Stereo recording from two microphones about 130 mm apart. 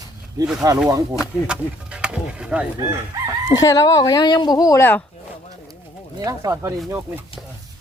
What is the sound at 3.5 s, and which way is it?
Speech, 25° left (ahead or behind).